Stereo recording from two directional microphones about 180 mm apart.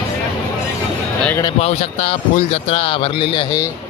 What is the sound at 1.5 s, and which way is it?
Speech, 35° left (ahead or behind).